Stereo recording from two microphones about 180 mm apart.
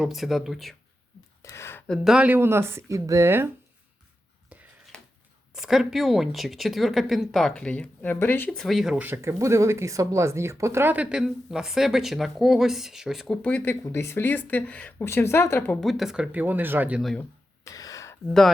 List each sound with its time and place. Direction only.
0.0 s speech: centre (ahead or behind)
1.4 s a sound: 15° left (ahead or behind)
2.0 s speech: 5° right (ahead or behind)
5.5 s speech: centre (ahead or behind)
17.7 s gasp: 20° left (ahead or behind)